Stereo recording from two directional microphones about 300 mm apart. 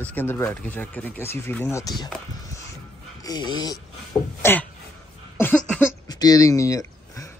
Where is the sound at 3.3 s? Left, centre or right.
Centre.